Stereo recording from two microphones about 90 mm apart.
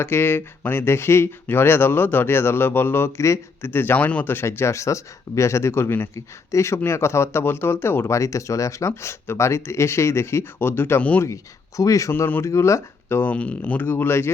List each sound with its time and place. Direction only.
0.0 s speech: 25° left (ahead or behind)
11.8 s speech: 35° left (ahead or behind)
13.3 s speech: 15° left (ahead or behind)